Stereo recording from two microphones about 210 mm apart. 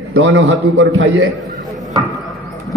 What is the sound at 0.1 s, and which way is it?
A man's voice, 65° right (ahead or behind).